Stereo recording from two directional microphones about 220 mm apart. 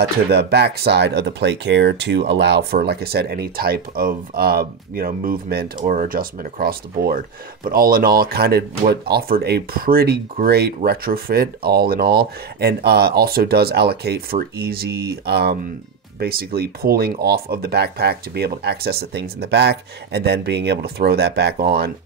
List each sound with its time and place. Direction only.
0.3 s speech: 50° right (ahead or behind)